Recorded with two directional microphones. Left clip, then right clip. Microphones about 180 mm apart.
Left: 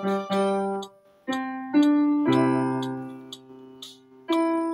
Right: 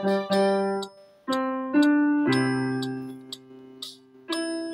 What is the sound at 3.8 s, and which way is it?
Music, 45° right (ahead or behind).